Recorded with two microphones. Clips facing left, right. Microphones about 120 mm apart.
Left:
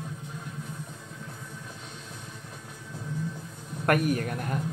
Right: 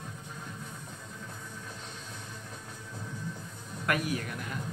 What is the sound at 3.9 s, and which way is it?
Speech, 50° left (ahead or behind).